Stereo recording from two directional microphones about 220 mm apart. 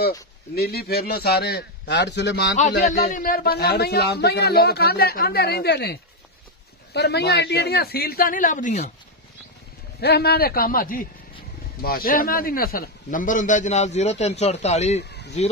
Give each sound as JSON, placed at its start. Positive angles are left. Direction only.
{"t": 0.6, "sound": "speech", "side_deg": 45}
{"t": 2.9, "sound": "speech", "side_deg": 35}
{"t": 9.9, "sound": "a man's voice", "side_deg": 45}
{"t": 15.0, "sound": "a sound", "side_deg": 50}